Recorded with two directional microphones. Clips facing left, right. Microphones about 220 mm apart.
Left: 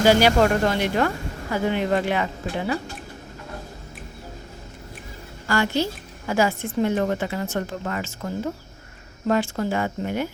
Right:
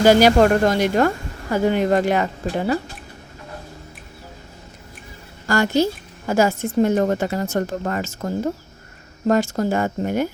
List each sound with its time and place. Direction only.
0.0 s a woman's voice: 45° right (ahead or behind)
5.5 s a woman's voice: 45° right (ahead or behind)